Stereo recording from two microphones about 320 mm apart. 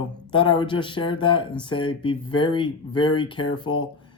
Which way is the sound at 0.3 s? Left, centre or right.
Centre.